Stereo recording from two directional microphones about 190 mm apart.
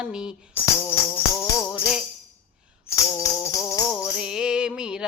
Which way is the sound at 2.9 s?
15° left (ahead or behind).